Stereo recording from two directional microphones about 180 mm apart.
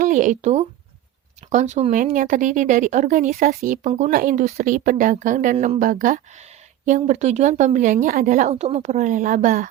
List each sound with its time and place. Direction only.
0.0 s speech: 45° right (ahead or behind)
3.3 s speech: 55° right (ahead or behind)
8.3 s speech: 35° right (ahead or behind)